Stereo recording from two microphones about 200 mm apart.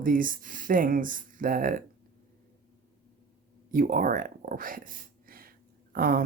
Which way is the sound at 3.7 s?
45° right (ahead or behind).